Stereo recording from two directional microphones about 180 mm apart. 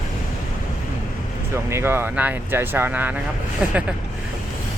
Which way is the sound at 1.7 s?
15° right (ahead or behind).